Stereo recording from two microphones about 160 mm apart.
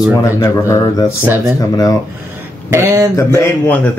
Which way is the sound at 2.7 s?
15° right (ahead or behind).